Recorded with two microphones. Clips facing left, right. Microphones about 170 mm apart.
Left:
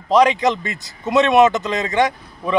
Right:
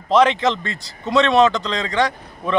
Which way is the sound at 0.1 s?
10° left (ahead or behind).